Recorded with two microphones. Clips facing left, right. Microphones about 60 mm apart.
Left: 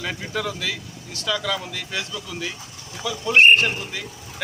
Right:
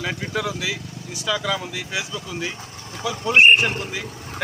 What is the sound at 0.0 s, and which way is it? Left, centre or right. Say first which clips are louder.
A man's voice: right 2 dB; centre.